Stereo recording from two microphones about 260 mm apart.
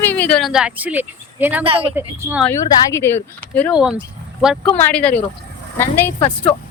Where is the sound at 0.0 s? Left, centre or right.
Centre.